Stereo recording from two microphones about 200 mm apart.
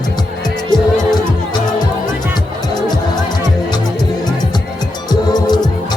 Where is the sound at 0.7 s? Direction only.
20° left (ahead or behind).